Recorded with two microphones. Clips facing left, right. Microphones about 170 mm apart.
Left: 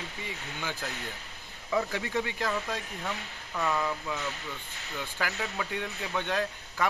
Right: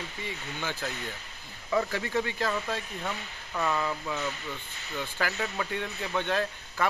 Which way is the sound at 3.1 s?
Centre (ahead or behind).